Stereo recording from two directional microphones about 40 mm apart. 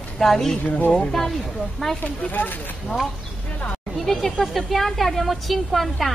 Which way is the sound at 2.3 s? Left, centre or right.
Left.